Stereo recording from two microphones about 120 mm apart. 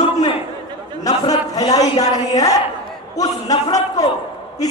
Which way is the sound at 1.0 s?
30° left (ahead or behind).